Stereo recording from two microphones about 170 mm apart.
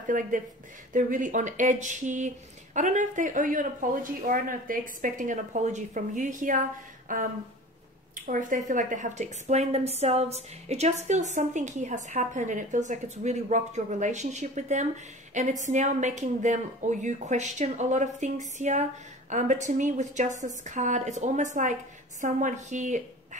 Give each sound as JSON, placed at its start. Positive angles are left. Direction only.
{"t": 0.0, "sound": "a woman's voice", "side_deg": -50}
{"t": 8.3, "sound": "a woman's voice", "side_deg": -50}